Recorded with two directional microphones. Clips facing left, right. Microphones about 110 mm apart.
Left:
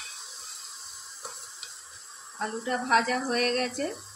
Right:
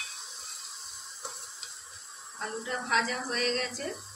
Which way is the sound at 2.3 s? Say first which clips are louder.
Left 5 dB; 50° left (ahead or behind).